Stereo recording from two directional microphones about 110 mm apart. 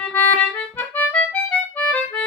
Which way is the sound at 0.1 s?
15° left (ahead or behind).